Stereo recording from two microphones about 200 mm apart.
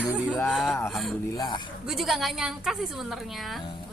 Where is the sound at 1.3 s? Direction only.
20° left (ahead or behind).